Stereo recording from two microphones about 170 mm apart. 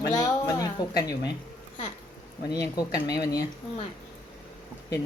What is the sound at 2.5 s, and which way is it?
Speech, 25° left (ahead or behind).